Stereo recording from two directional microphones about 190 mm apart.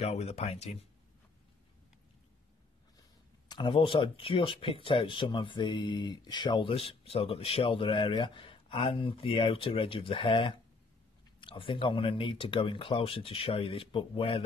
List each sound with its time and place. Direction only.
0.0 s speech: 35° left (ahead or behind)
3.4 s speech: 25° left (ahead or behind)